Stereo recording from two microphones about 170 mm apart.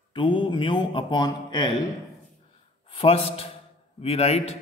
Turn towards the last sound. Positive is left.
turn(degrees=40)  # may be behind; listen again after turning